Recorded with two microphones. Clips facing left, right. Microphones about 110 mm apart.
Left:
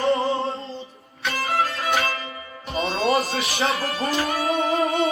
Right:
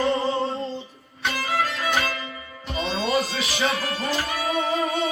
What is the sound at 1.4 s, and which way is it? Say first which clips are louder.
Music: left 2 dB; 30° left (ahead or behind).